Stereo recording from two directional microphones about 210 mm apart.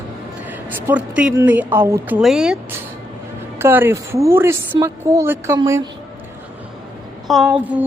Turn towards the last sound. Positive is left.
turn(degrees=-5)  # may be behind; listen again after turning